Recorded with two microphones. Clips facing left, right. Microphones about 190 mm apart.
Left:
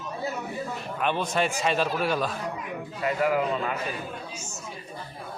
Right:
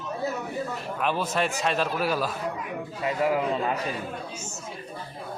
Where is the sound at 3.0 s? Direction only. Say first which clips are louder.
Even; 30° right (ahead or behind).